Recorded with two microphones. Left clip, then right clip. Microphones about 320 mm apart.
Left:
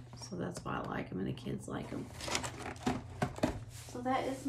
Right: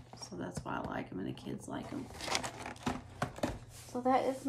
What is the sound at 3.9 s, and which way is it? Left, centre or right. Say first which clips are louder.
Speech: right 5 dB; centre.